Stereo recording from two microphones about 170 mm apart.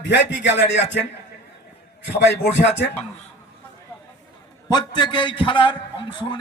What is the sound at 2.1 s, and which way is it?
Speech, 90° left.